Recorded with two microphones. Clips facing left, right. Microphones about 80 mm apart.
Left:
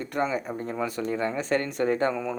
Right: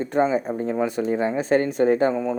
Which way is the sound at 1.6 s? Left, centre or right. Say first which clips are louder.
Right 6 dB; left.